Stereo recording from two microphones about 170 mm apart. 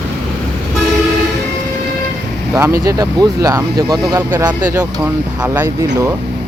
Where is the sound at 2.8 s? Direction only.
20° right (ahead or behind).